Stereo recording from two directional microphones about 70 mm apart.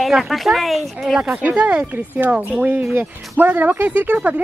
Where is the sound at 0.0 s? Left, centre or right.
Centre.